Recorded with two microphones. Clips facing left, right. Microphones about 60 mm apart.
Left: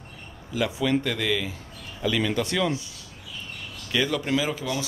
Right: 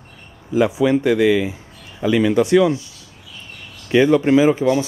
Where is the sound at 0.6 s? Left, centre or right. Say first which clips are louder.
Right 9 dB; centre.